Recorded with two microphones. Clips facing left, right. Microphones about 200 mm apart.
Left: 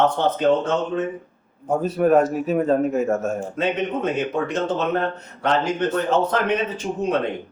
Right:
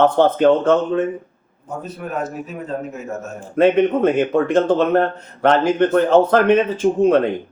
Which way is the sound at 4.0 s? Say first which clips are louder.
Right 7 dB; 55° right (ahead or behind).